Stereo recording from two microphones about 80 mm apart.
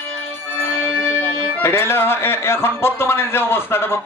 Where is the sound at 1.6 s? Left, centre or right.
Left.